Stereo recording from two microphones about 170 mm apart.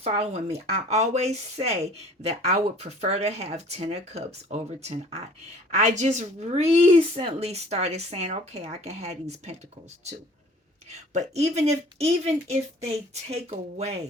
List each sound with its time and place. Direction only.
0.0 s speech: 40° right (ahead or behind)
10.8 s speech: 40° right (ahead or behind)